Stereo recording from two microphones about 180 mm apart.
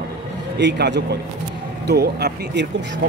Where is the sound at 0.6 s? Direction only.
75° right (ahead or behind).